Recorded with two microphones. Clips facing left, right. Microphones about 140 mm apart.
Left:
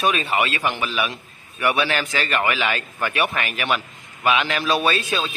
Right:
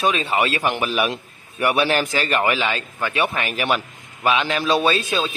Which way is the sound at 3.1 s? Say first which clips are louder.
Right 1 dB; 20° right (ahead or behind).